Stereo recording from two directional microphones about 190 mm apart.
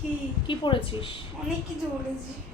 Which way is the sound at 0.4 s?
25° left (ahead or behind).